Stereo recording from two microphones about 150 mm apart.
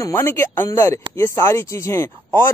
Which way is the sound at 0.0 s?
20° left (ahead or behind).